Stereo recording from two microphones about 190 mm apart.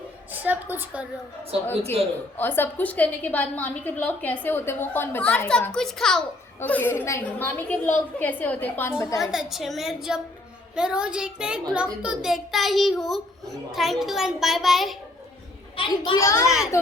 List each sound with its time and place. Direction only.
0.4 s a woman's voice: 10° right (ahead or behind)
2.4 s a woman's voice: 10° left (ahead or behind)
9.2 s a child's voice: centre (ahead or behind)
15.7 s a child's voice: 25° left (ahead or behind)
16.4 s a child's voice: 5° right (ahead or behind)